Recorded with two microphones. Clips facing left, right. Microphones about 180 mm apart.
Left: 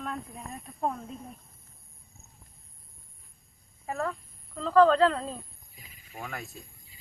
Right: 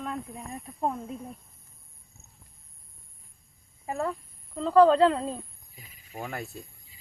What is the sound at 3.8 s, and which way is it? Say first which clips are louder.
Speech: right 2 dB; 15° right (ahead or behind).